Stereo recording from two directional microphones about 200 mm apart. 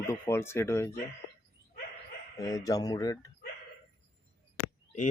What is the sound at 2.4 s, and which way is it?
Speech, 15° left (ahead or behind).